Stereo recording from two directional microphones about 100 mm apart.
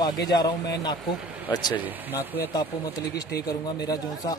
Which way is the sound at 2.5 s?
35° left (ahead or behind).